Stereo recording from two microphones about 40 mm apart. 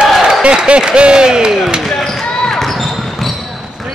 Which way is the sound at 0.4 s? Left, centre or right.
Right.